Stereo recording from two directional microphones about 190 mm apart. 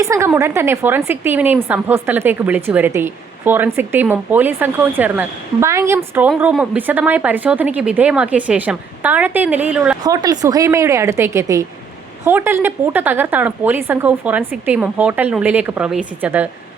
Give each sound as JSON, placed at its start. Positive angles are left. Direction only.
{"t": 0.0, "sound": "a woman's voice", "side_deg": -15}
{"t": 10.0, "sound": "a woman's voice", "side_deg": -20}